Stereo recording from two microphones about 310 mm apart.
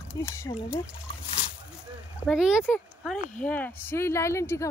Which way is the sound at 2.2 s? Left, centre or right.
Centre.